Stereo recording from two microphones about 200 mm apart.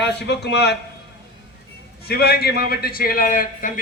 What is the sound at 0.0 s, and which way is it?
Speech, 60° left (ahead or behind).